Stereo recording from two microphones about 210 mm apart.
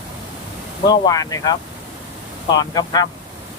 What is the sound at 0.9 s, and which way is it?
Speech, 20° left (ahead or behind).